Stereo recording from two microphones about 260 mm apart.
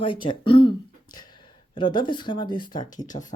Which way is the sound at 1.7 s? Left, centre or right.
Centre.